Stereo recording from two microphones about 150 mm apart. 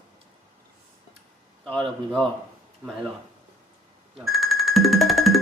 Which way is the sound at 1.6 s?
10° left (ahead or behind).